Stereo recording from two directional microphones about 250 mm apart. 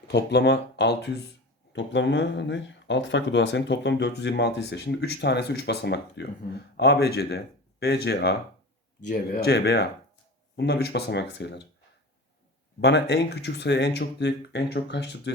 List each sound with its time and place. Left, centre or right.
0.1 s speech: left
12.8 s speech: left